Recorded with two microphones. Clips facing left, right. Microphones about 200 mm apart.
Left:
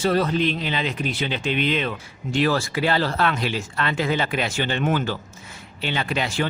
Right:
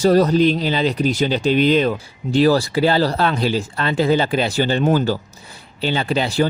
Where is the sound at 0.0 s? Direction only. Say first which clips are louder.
Right 7 dB; 40° right (ahead or behind).